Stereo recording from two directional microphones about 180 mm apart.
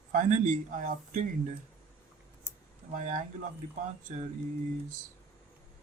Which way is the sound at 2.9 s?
45° right (ahead or behind).